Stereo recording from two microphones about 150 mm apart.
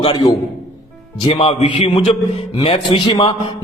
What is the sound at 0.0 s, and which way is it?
A man's voice, 35° left (ahead or behind).